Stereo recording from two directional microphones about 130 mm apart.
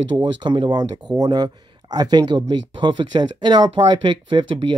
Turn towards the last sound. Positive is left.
turn(degrees=-35)  # may be behind; listen again after turning